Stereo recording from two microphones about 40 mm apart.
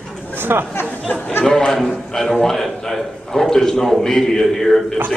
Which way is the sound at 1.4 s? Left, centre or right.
Centre.